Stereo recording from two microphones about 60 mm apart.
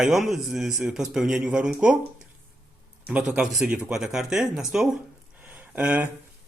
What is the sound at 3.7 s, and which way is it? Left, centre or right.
Speech, centre.